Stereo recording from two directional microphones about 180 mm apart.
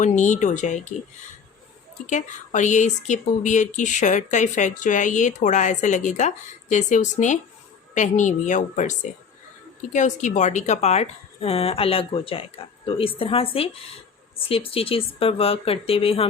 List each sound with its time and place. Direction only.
0.0 s speech: 40° left (ahead or behind)
2.0 s speech: 40° left (ahead or behind)